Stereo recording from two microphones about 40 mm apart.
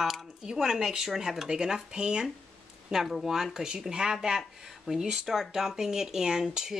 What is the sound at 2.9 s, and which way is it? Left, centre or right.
Speech, centre.